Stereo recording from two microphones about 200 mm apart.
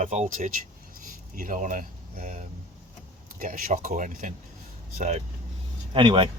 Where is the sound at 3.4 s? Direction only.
45° right (ahead or behind).